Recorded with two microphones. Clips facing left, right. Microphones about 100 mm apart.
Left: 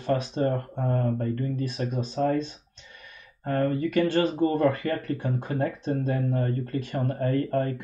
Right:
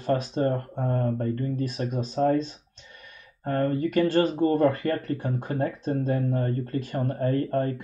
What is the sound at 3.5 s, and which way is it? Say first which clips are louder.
Speech: even; 45° right (ahead or behind).